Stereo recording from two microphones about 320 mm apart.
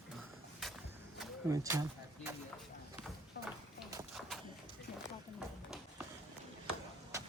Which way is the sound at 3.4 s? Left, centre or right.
Left.